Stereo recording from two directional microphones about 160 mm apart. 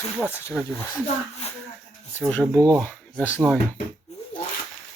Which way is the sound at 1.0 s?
40° left (ahead or behind).